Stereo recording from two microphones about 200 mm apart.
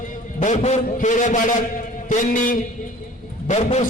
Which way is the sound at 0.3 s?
35° left (ahead or behind).